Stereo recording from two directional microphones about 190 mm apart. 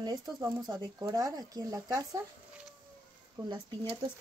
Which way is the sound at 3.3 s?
20° right (ahead or behind).